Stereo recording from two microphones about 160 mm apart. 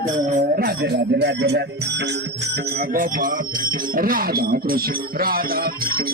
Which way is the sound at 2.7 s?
60° right (ahead or behind).